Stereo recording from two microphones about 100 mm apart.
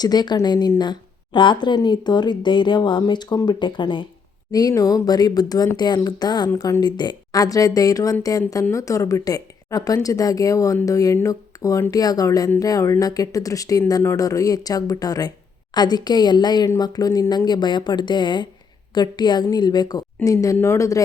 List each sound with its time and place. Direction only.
0.0 s speech: 45° left (ahead or behind)
4.5 s speech: 40° left (ahead or behind)
20.2 s speech: 35° left (ahead or behind)